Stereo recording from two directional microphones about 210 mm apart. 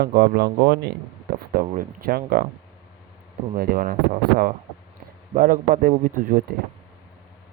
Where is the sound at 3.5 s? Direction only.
45° right (ahead or behind).